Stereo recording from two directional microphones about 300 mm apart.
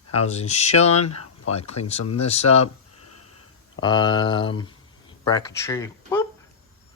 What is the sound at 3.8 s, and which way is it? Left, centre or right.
A man's voice, centre.